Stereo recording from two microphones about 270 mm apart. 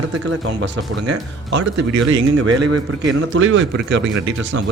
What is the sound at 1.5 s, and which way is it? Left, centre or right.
Speech, right.